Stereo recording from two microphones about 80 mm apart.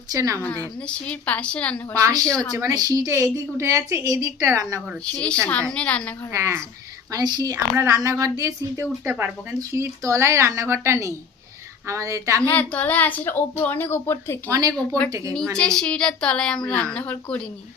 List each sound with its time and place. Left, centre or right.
0.1 s a woman's voice: right
0.4 s a woman's voice: left
1.9 s a woman's voice: right
3.1 s a woman's voice: right
5.0 s a woman's voice: centre
6.3 s a woman's voice: right
7.1 s a woman's voice: right
7.8 s a woman's voice: right
8.8 s speech: right
9.7 s a woman's voice: right
12.4 s speech: centre
14.8 s a woman's voice: centre
15.1 s a woman's voice: right
15.5 s a woman's voice: centre